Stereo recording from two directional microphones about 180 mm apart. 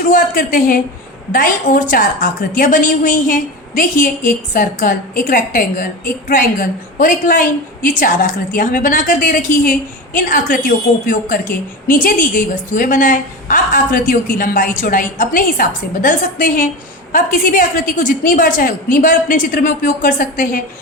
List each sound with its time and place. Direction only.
0.1 s a woman's voice: 50° left (ahead or behind)